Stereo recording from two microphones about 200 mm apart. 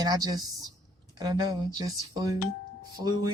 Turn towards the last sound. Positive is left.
turn(degrees=-15)  # may be behind; listen again after turning